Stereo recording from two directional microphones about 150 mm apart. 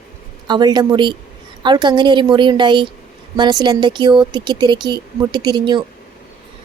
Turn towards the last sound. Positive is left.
turn(degrees=-30)  # may be behind; listen again after turning